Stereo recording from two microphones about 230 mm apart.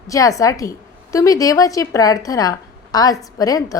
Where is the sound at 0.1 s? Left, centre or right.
Centre.